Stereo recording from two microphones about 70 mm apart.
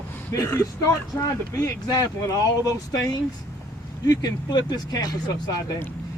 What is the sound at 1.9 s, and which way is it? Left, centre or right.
Speech, left.